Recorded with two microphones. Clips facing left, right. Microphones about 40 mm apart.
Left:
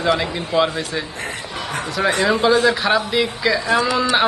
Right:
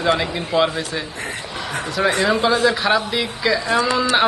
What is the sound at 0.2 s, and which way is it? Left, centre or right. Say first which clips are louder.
Speech: even; centre.